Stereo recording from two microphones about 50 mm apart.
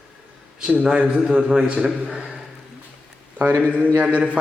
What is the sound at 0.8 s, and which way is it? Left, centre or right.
A man's voice, centre.